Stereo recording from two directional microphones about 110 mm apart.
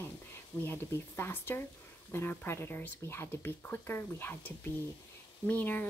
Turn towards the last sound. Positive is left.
turn(degrees=15)  # may be behind; listen again after turning